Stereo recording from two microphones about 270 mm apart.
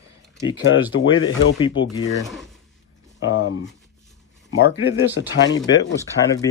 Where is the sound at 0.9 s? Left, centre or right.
Left.